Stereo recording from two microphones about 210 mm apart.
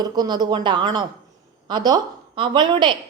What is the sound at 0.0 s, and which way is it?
A woman's voice, 20° right (ahead or behind).